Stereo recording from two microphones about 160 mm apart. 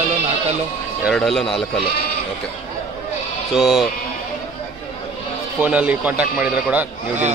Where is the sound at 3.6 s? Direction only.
Centre (ahead or behind).